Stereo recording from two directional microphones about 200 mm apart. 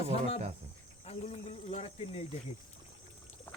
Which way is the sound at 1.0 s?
30° left (ahead or behind).